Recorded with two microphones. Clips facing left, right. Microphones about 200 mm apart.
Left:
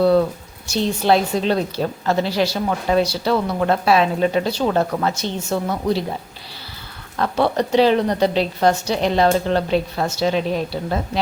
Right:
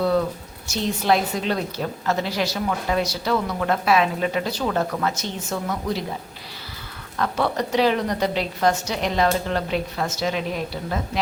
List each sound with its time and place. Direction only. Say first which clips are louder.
0.7 s a woman's voice: left 4 dB; 30° left (ahead or behind)
7.2 s a woman's voice: left 4 dB; 30° left (ahead or behind)